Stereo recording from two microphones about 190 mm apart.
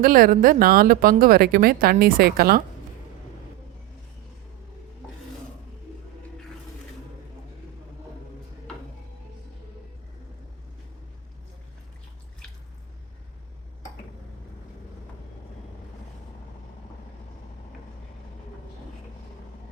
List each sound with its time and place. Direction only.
0.0 s a woman's voice: 50° right (ahead or behind)